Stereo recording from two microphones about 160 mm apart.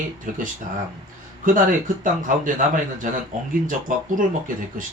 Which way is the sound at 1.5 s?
55° right (ahead or behind).